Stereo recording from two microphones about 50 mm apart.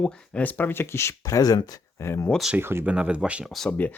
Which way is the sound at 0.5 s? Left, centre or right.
Left.